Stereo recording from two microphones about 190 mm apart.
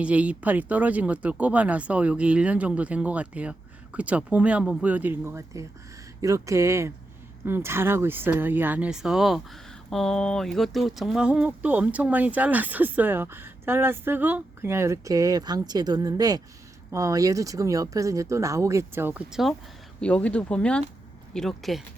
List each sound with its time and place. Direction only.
0.0 s speech: 5° right (ahead or behind)